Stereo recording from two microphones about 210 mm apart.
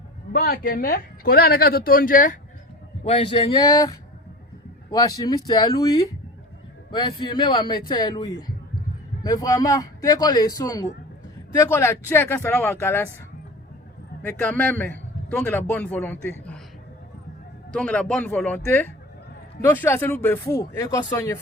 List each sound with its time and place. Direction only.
0.3 s speech: 45° left (ahead or behind)
3.0 s a man's voice: 25° left (ahead or behind); by 13.1 s 10° left (ahead or behind)
14.2 s a man's voice: 10° left (ahead or behind)
17.7 s speech: 5° left (ahead or behind)